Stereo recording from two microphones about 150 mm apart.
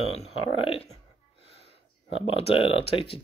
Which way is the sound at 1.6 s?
45° right (ahead or behind).